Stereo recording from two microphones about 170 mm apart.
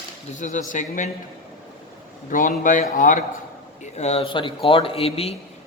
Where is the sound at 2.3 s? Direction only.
50° left (ahead or behind).